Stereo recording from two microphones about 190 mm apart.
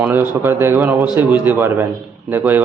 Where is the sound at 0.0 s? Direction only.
10° right (ahead or behind).